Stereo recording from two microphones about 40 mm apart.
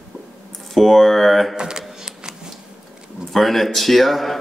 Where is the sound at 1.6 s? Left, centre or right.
Centre.